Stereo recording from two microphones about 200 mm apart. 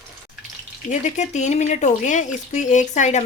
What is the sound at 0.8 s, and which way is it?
Speech, 35° left (ahead or behind).